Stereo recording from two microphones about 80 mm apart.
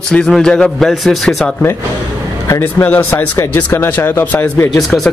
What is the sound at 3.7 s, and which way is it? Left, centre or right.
Speech, left.